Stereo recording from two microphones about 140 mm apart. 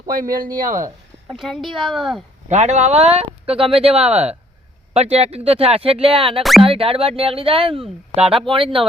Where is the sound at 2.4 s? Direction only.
55° right (ahead or behind).